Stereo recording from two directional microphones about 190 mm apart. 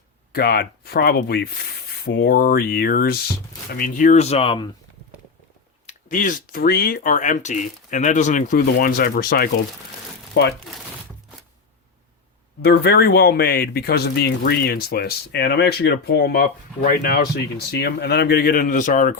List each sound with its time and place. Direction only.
0.3 s speech: 55° left (ahead or behind); by 4.7 s 25° left (ahead or behind)
5.8 s speech: 40° left (ahead or behind)
10.4 s speech: 60° left (ahead or behind)
12.6 s speech: 55° left (ahead or behind)